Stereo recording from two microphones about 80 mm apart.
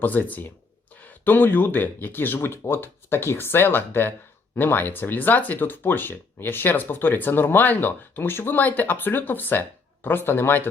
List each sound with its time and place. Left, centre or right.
0.0 s speech: left